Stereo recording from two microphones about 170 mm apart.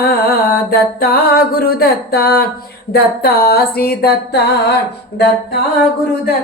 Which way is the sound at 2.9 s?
65° left (ahead or behind).